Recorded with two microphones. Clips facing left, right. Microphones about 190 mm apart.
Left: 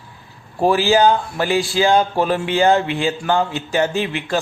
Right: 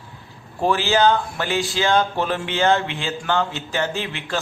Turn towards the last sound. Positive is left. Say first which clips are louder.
# left 6 dB
turn(degrees=15)  # may be behind; listen again after turning